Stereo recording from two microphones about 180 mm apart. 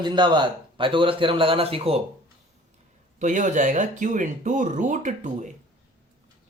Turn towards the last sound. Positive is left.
turn(degrees=-45)  # may be behind; listen again after turning